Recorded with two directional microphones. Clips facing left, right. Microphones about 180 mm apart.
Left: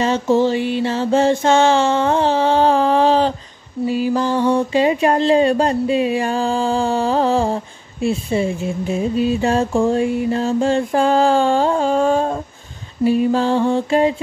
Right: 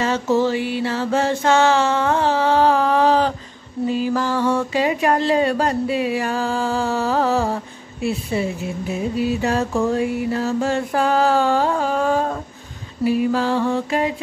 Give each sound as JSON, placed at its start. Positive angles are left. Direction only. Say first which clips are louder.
{"t": 0.0, "sound": "speech", "louder": "left 3 dB", "side_deg": 20}
{"t": 3.8, "sound": "speech", "louder": "left 2 dB", "side_deg": 15}